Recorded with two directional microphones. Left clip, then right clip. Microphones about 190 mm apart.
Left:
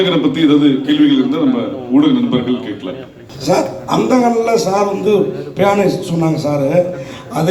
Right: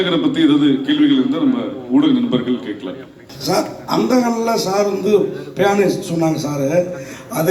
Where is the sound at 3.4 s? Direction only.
20° right (ahead or behind).